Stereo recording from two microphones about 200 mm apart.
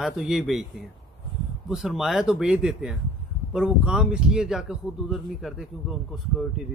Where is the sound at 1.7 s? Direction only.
Centre (ahead or behind).